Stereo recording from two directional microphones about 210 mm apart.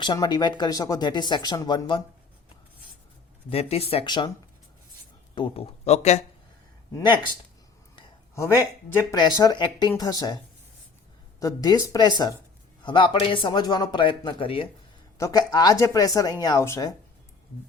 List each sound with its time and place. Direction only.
0.0 s speech: 20° left (ahead or behind)
3.5 s speech: 30° left (ahead or behind)
5.3 s speech: 25° left (ahead or behind)
7.9 s speech: 15° left (ahead or behind)